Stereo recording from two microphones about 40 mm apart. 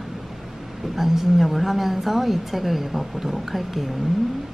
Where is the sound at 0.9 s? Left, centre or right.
Centre.